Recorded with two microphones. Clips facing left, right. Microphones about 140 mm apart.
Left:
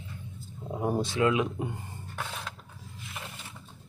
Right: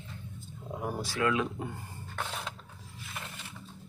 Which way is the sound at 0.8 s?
25° left (ahead or behind).